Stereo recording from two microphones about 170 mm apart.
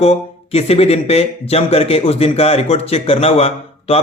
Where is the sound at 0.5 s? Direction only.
35° left (ahead or behind).